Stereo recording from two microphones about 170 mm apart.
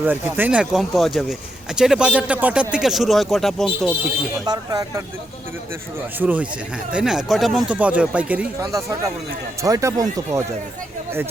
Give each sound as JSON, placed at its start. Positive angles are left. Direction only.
{"t": 0.0, "sound": "speech", "side_deg": -10}
{"t": 4.4, "sound": "speech", "side_deg": -20}
{"t": 6.1, "sound": "speech", "side_deg": -10}
{"t": 9.6, "sound": "speech", "side_deg": -20}